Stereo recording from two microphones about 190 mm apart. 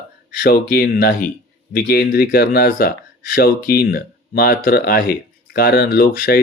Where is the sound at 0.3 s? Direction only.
55° left (ahead or behind).